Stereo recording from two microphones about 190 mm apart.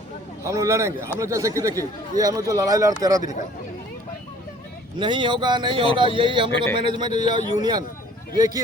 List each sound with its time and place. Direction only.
0.4 s a man's voice: 15° right (ahead or behind)
4.9 s speech: 25° right (ahead or behind)